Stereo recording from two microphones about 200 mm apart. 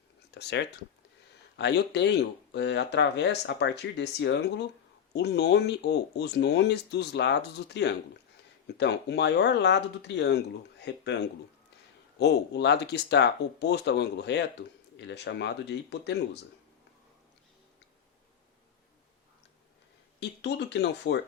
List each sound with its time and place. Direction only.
0.3 s a sound: 55° left (ahead or behind)
1.5 s speech: 60° left (ahead or behind)
12.2 s speech: 55° left (ahead or behind)
20.1 s speech: 60° left (ahead or behind)